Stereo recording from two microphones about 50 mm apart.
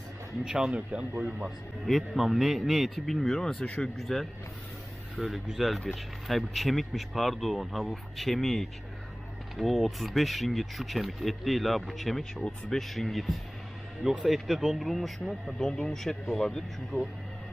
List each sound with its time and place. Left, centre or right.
0.4 s speech: centre
1.5 s speech: centre
14.0 s speech: centre
15.5 s speech: centre
16.9 s speech: left